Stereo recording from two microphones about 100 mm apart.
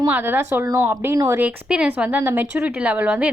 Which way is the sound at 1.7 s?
10° right (ahead or behind).